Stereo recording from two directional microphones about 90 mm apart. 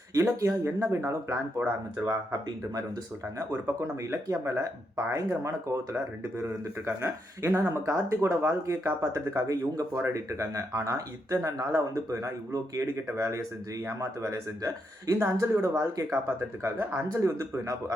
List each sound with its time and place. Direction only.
0.1 s speech: 35° right (ahead or behind)
3.3 s speech: 35° right (ahead or behind)
9.1 s speech: 35° right (ahead or behind)